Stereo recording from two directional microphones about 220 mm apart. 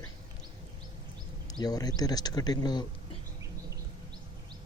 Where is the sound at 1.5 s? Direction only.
15° left (ahead or behind).